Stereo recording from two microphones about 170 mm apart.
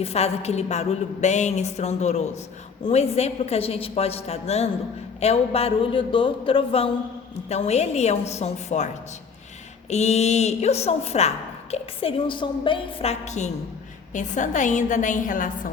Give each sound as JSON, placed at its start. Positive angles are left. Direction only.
{"t": 0.0, "sound": "a woman's voice", "side_deg": 40}
{"t": 9.9, "sound": "a woman's voice", "side_deg": 40}